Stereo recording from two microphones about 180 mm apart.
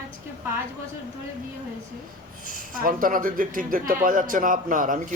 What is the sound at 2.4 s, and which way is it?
A man's voice, 50° right (ahead or behind).